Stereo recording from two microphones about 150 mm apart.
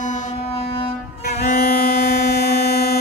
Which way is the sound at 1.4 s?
90° left.